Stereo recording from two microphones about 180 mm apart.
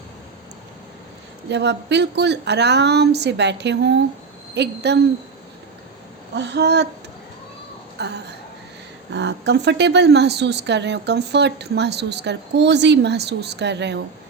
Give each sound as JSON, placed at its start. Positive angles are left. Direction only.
{"t": 1.5, "sound": "a woman's voice", "side_deg": -70}
{"t": 6.3, "sound": "a woman's voice", "side_deg": -75}
{"t": 7.9, "sound": "a woman's voice", "side_deg": -65}